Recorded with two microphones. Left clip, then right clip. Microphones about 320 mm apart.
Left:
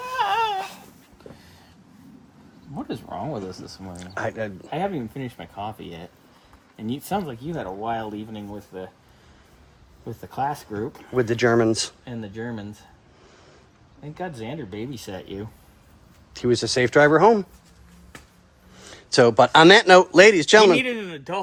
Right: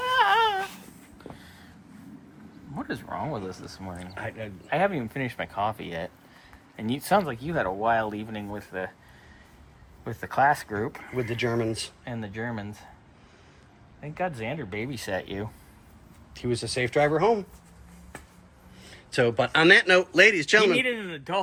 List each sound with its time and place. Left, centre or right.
0.2 s baby cry: centre
2.7 s speech: centre
4.1 s speech: left
4.7 s speech: centre
10.1 s speech: centre
11.2 s speech: left
12.3 s speech: centre
14.2 s speech: centre
16.3 s speech: left
18.8 s speech: left